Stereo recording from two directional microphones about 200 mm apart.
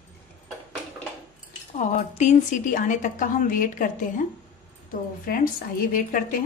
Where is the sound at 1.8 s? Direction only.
35° left (ahead or behind).